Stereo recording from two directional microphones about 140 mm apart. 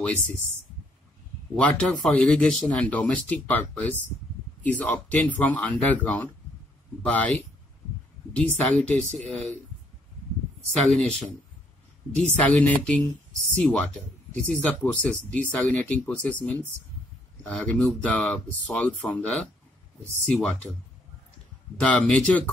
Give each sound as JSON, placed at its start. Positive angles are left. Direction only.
{"t": 1.6, "sound": "speech", "side_deg": 10}
{"t": 10.7, "sound": "speech", "side_deg": 5}
{"t": 12.4, "sound": "speech", "side_deg": 10}
{"t": 21.7, "sound": "speech", "side_deg": 10}